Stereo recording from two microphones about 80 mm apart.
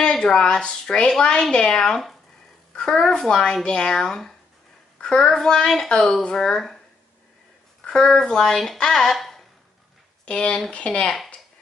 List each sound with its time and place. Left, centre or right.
0.0 s a woman's voice: centre
7.8 s speech: centre
10.2 s a woman's voice: centre